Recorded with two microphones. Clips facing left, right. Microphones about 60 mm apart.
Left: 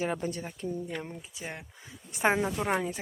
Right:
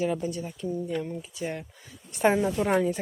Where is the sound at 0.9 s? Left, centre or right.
Left.